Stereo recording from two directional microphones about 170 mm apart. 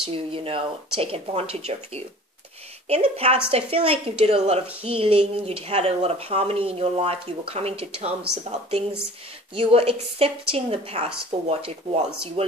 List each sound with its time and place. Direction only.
0.0 s a woman's voice: 30° right (ahead or behind)